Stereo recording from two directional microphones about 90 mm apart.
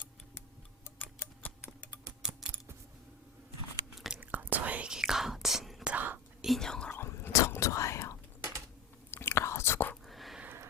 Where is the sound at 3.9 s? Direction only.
5° right (ahead or behind).